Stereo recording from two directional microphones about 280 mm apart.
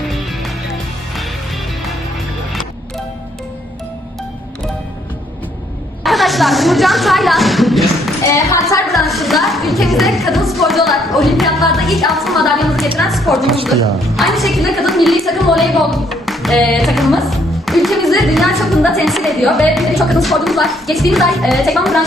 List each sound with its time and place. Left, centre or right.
6.0 s a woman's voice: centre
8.3 s a woman's voice: centre
8.9 s a woman's voice: centre